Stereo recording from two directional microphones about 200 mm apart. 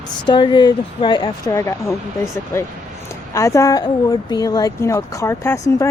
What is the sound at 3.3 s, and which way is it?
Speech, 15° left (ahead or behind).